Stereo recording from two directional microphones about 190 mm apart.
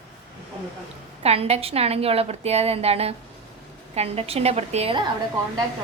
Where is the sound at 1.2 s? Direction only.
35° right (ahead or behind).